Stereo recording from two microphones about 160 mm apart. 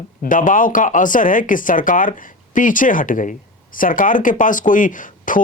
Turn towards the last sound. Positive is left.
turn(degrees=55)  # may be behind; listen again after turning